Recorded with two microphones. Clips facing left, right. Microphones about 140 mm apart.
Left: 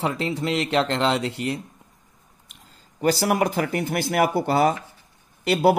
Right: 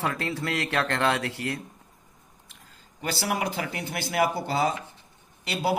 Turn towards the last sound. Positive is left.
turn(degrees=50)  # may be behind; listen again after turning